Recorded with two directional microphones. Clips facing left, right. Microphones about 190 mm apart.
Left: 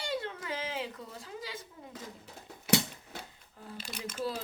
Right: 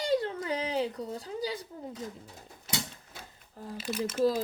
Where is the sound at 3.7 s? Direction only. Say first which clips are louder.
Right 9 dB; 5° right (ahead or behind).